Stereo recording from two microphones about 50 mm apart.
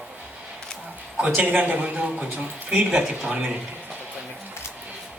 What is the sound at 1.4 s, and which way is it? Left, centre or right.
A man's voice, right.